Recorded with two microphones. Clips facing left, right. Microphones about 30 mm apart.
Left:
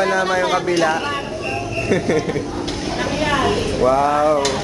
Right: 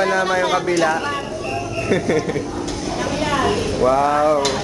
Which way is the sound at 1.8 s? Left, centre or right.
Centre.